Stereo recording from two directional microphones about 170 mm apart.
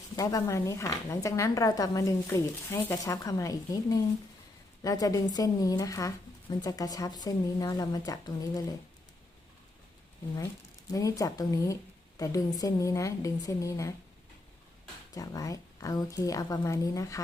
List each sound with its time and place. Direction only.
0.2 s speech: 20° left (ahead or behind)
10.9 s speech: 20° left (ahead or behind)
15.1 s speech: 20° left (ahead or behind)